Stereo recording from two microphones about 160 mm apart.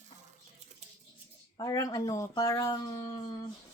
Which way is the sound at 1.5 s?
20° left (ahead or behind).